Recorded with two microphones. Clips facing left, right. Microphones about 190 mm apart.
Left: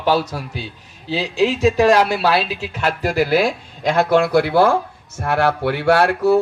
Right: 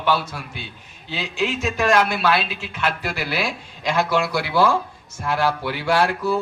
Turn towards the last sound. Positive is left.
turn(degrees=65)  # may be behind; listen again after turning